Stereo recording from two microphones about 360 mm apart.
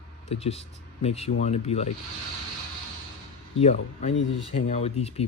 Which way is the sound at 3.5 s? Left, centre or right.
Centre.